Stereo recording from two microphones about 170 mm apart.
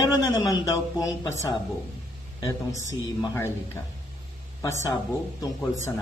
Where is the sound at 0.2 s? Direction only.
25° left (ahead or behind).